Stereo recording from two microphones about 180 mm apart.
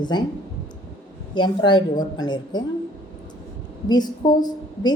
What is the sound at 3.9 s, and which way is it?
A woman's voice, 20° left (ahead or behind).